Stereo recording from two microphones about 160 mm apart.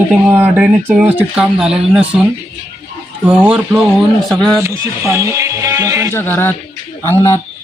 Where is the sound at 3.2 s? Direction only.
5° right (ahead or behind).